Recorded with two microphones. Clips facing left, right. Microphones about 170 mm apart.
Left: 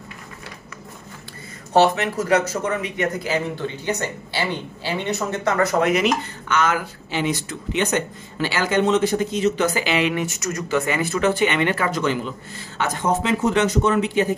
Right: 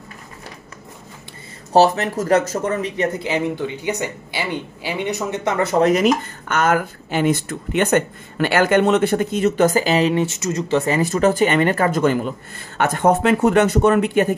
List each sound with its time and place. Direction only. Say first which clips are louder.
1.7 s speech: right 2 dB; 35° right (ahead or behind)
3.2 s speech: right 3 dB; 20° right (ahead or behind); by 14.3 s 55° right (ahead or behind)